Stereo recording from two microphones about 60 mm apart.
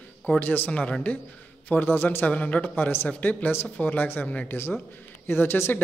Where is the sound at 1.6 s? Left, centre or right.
Left.